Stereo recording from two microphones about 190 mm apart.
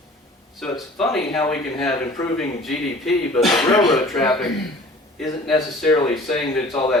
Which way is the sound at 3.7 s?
25° left (ahead or behind).